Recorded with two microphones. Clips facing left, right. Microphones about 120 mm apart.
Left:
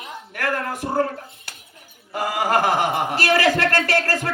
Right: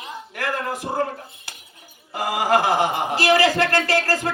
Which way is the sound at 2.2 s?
50° left (ahead or behind).